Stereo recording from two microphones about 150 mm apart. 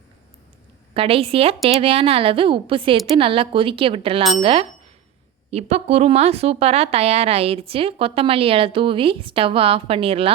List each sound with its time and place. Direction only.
0.9 s a woman's voice: 40° right (ahead or behind)